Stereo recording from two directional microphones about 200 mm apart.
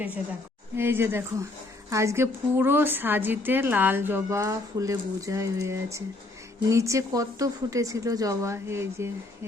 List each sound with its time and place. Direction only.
0.8 s a woman's voice: 10° right (ahead or behind)